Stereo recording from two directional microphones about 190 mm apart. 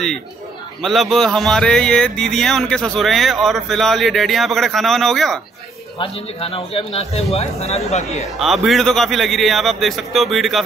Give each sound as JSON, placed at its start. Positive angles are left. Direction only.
{"t": 0.8, "sound": "speech", "side_deg": 0}
{"t": 5.9, "sound": "a man's voice", "side_deg": 30}
{"t": 8.4, "sound": "speech", "side_deg": 0}